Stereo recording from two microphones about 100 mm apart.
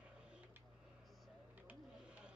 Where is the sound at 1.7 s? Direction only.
10° right (ahead or behind).